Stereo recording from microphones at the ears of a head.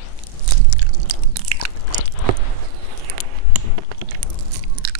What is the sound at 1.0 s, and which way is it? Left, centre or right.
Chewing, right.